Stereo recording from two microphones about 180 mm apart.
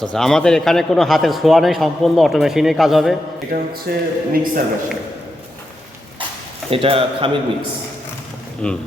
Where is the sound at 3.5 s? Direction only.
60° right (ahead or behind).